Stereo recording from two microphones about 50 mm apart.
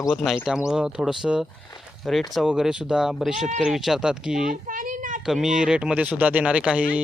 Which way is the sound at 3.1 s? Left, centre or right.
Centre.